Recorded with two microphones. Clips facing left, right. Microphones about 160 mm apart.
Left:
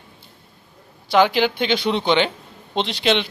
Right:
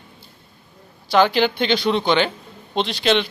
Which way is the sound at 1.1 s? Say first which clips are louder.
Even; 15° left (ahead or behind).